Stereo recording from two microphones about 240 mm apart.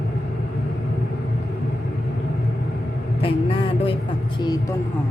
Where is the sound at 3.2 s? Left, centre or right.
Left.